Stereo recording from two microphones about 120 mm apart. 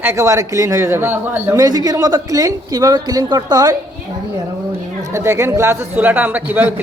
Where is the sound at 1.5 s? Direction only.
30° right (ahead or behind).